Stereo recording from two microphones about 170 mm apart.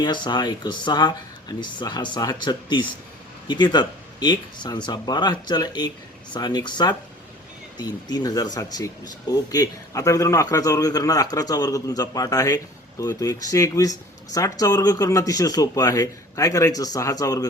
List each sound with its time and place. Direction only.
0.0 s speech: 25° left (ahead or behind)